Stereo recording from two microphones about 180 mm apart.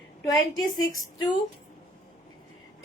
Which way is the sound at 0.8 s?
25° left (ahead or behind).